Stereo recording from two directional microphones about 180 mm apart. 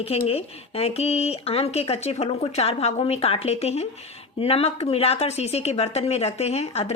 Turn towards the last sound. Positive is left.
turn(degrees=35)  # may be behind; listen again after turning